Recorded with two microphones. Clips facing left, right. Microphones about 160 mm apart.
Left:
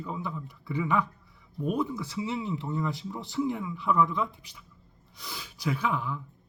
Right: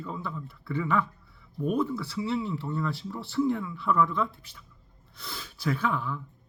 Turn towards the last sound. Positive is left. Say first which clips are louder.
# right 1 dB
turn(degrees=15)  # may be behind; listen again after turning